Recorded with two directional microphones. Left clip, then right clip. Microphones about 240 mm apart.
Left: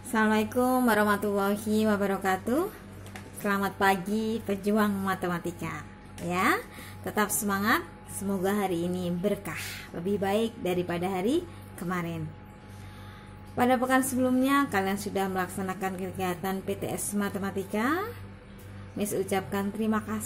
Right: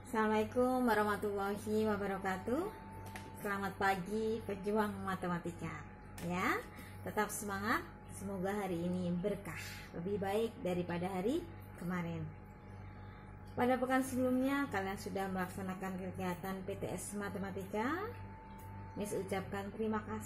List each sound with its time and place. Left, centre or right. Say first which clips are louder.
0.1 s a woman's voice: left 8 dB; left
13.6 s a woman's voice: left 9 dB; left